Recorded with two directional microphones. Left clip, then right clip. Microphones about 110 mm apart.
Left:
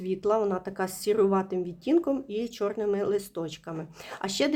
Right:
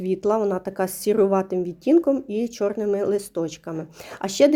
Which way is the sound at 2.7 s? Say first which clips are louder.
Right 4 dB; 20° right (ahead or behind).